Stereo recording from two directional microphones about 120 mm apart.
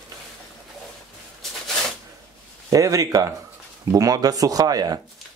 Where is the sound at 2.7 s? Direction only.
30° right (ahead or behind).